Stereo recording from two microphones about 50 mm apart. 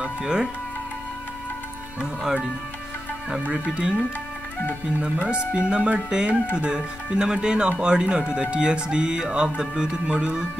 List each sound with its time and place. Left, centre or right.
0.0 s speech: centre
3.5 s speech: centre
5.0 s speech: right
5.9 s speech: centre